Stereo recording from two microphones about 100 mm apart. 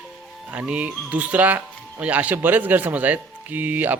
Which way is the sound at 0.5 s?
15° right (ahead or behind).